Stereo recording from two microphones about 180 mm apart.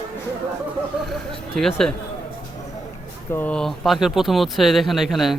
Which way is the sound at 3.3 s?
10° left (ahead or behind).